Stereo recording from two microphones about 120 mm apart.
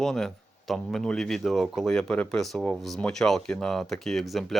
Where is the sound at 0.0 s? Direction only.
5° left (ahead or behind).